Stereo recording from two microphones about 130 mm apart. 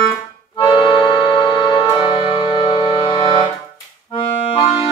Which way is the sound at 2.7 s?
40° left (ahead or behind).